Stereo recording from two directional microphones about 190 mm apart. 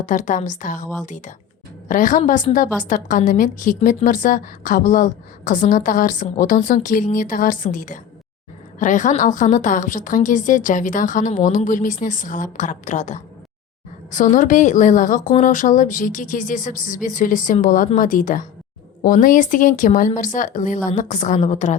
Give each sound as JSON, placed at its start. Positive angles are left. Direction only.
{"t": 0.0, "sound": "a woman's voice", "side_deg": 40}